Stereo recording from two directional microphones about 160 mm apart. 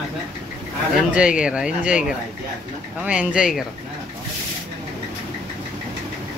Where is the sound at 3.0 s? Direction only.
5° right (ahead or behind).